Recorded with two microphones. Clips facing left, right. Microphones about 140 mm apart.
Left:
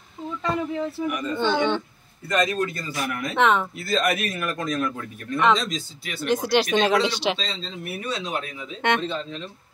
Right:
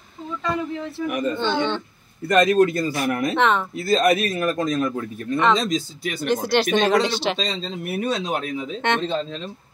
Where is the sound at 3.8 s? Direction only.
40° right (ahead or behind).